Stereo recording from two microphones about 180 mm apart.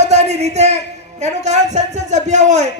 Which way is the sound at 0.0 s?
40° right (ahead or behind).